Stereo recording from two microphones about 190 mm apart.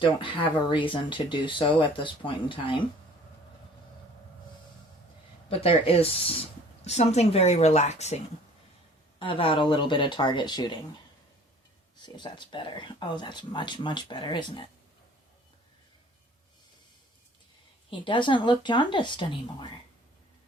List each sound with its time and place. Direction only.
0.0 s speech: 25° left (ahead or behind)
5.5 s speech: 30° left (ahead or behind)
12.0 s speech: 25° left (ahead or behind)
17.9 s speech: 25° left (ahead or behind)